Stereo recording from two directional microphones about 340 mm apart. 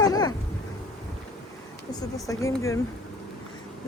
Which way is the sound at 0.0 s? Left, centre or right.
Centre.